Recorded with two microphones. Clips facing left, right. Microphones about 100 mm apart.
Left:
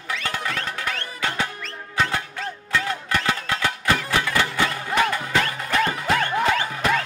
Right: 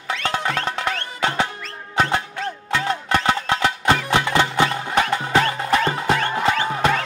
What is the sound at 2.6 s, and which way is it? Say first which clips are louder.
Music: right 2 dB; 25° right (ahead or behind).